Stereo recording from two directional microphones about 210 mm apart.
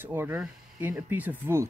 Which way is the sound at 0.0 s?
10° right (ahead or behind).